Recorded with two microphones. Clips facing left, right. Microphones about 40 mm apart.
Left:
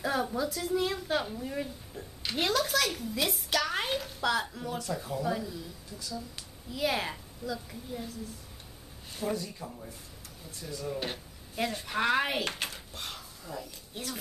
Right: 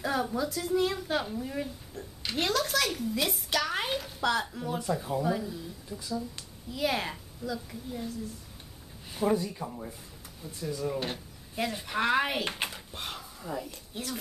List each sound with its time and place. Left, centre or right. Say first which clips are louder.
0.0 s a woman's voice: right 1 dB; centre
6.3 s a woman's voice: right 1 dB; centre
9.1 s speech: right 6 dB; centre
10.5 s a woman's voice: right 4 dB; centre
12.5 s a sound: right 2 dB; centre
13.7 s speech: right 2 dB; centre